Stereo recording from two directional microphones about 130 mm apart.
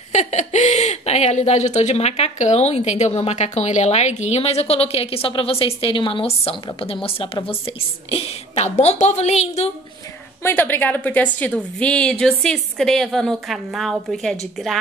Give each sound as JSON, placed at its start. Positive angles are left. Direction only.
{"t": 0.1, "sound": "speech", "side_deg": 65}
{"t": 10.4, "sound": "a woman's voice", "side_deg": 15}